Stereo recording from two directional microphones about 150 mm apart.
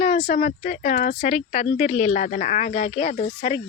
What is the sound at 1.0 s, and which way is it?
Speech, 65° left (ahead or behind).